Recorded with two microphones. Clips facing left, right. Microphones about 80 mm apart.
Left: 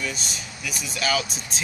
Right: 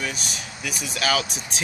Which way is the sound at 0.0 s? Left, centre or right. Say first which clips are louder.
Right 1 dB; right.